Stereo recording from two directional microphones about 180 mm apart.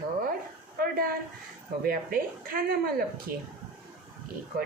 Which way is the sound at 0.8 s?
55° right (ahead or behind).